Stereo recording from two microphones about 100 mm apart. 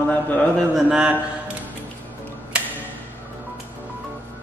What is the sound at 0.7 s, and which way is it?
Speech, 10° right (ahead or behind).